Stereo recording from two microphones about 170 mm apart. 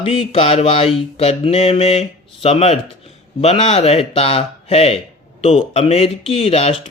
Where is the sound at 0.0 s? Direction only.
35° left (ahead or behind).